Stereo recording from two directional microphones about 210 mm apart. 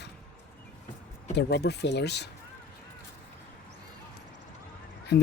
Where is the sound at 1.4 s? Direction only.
50° left (ahead or behind).